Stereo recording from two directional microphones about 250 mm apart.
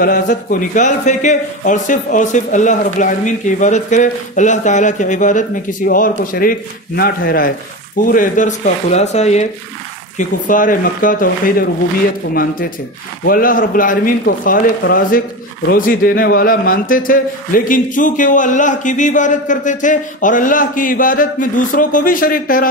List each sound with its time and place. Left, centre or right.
0.0 s speech: left